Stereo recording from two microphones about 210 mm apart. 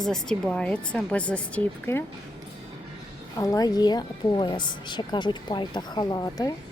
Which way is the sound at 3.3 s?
15° left (ahead or behind).